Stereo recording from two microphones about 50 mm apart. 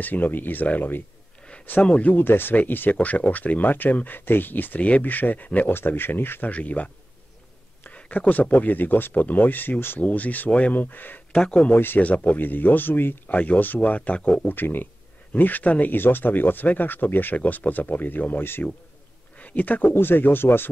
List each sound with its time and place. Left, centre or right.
0.0 s speech: left
1.8 s speech: left
2.2 s speech: left
5.7 s speech: left
6.5 s speech: left
7.9 s speech: left
9.9 s speech: left
11.3 s speech: centre
11.7 s speech: left
12.0 s speech: left
13.3 s speech: left
14.5 s speech: left
15.9 s speech: left